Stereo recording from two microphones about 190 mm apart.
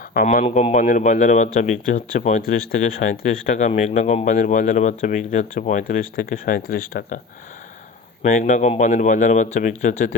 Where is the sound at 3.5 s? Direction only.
40° left (ahead or behind).